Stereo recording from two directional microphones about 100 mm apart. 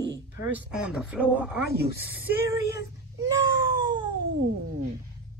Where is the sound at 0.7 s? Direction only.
5° right (ahead or behind).